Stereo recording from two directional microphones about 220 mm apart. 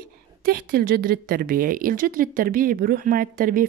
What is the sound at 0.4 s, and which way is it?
Speech, 45° right (ahead or behind).